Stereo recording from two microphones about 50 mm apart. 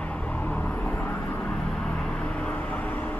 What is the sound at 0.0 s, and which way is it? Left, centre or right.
Vehicle, left.